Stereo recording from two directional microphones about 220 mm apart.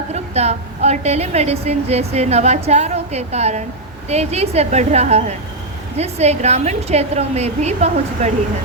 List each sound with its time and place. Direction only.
0.1 s a woman's voice: 30° right (ahead or behind)